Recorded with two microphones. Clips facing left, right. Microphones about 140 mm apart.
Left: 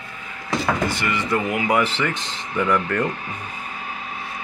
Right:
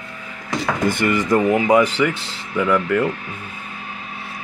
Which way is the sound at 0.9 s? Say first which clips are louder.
Right 6 dB; 50° right (ahead or behind).